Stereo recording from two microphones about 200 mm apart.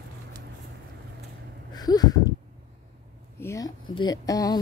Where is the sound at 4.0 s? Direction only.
20° left (ahead or behind).